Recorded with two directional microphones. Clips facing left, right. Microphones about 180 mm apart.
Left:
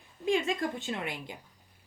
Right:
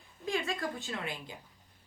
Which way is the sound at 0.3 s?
20° left (ahead or behind).